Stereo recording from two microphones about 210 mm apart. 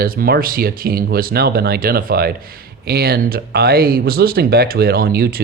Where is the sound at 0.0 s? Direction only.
45° right (ahead or behind).